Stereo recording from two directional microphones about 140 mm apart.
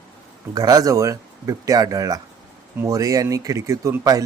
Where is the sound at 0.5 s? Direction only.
25° right (ahead or behind).